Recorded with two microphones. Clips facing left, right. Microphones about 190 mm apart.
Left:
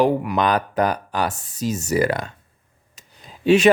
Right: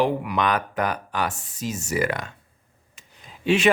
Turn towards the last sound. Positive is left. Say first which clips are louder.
# left 6 dB
turn(degrees=40)  # may be behind; listen again after turning